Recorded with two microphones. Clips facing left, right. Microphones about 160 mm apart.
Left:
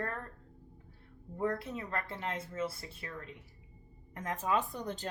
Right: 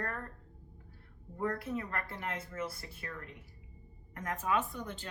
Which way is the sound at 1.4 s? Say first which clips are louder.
Even; 25° left (ahead or behind).